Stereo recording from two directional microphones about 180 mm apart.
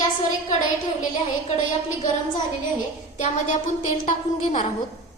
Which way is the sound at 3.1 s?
40° left (ahead or behind).